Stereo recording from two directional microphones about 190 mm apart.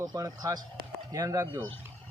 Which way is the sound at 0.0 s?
20° right (ahead or behind).